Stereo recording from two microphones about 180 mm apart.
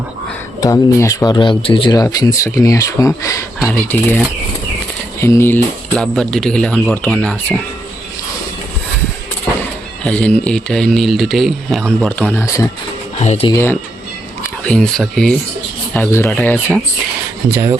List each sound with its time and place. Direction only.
0.6 s speech: 15° left (ahead or behind)
5.2 s speech: 15° left (ahead or behind)
10.0 s speech: 5° left (ahead or behind)
13.1 s speech: 35° left (ahead or behind)
13.5 s speech: 15° left (ahead or behind)
17.5 s speech: 15° right (ahead or behind)